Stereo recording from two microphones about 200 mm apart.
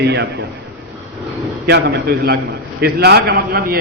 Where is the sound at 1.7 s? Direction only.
60° right (ahead or behind).